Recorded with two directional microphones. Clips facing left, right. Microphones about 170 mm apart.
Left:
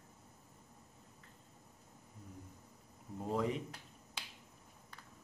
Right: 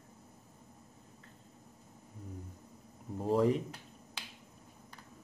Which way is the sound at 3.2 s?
35° right (ahead or behind).